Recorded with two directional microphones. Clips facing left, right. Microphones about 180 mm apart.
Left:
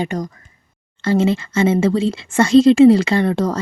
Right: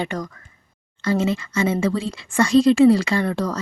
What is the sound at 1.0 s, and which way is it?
Speech, 25° left (ahead or behind).